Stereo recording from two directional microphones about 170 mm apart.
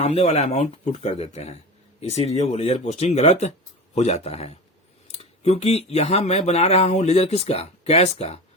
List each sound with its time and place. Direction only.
0.0 s speech: 40° left (ahead or behind)